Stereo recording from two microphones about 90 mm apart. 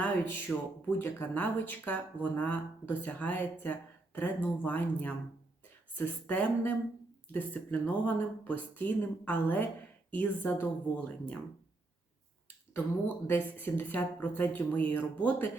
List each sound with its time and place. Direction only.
0.0 s speech: 20° left (ahead or behind)
6.2 s speech: 15° left (ahead or behind)
13.2 s speech: 20° left (ahead or behind)